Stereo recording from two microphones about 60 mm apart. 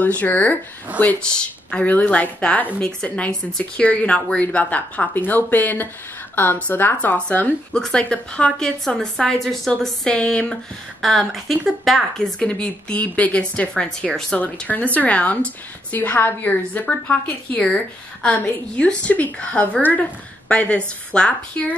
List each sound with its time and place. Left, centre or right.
0.0 s a woman's voice: left
1.2 s a woman's voice: centre
3.0 s a woman's voice: centre
7.7 s a woman's voice: centre
11.0 s a woman's voice: centre
12.4 s a woman's voice: centre
16.8 s a woman's voice: centre